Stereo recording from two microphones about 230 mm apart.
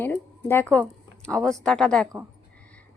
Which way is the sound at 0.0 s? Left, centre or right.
Centre.